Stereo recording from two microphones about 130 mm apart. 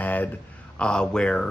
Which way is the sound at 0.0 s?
15° left (ahead or behind).